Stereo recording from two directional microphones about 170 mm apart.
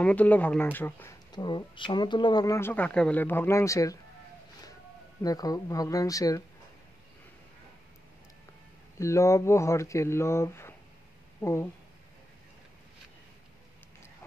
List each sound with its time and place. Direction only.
0.0 s speech: 10° left (ahead or behind)
1.3 s speech: 25° left (ahead or behind)
5.2 s speech: 20° left (ahead or behind)
8.9 s speech: 15° left (ahead or behind)